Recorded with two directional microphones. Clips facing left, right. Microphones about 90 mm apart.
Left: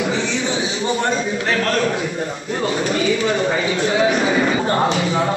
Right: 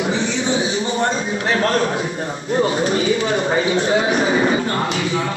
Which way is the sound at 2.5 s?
30° right (ahead or behind).